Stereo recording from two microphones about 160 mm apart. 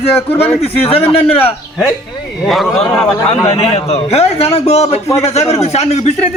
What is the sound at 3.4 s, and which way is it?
A man's voice, 35° left (ahead or behind).